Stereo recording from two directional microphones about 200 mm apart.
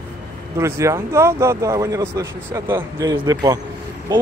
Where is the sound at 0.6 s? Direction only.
15° right (ahead or behind).